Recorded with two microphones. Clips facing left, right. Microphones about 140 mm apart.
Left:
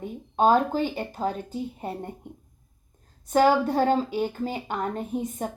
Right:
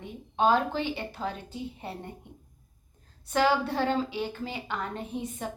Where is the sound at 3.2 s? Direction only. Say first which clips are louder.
Left 5 dB; 45° left (ahead or behind).